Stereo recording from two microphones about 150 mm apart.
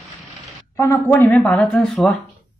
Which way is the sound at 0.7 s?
20° left (ahead or behind).